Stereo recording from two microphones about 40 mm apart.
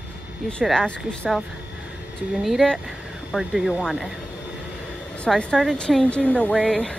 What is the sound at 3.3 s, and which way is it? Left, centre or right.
Speech, left.